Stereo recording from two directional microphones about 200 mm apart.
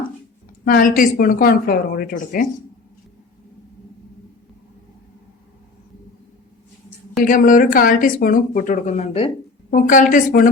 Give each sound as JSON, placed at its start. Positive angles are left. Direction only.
{"t": 0.6, "sound": "a woman's voice", "side_deg": 45}
{"t": 7.2, "sound": "a woman's voice", "side_deg": 45}